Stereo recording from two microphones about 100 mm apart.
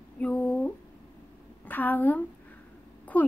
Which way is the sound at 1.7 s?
15° left (ahead or behind).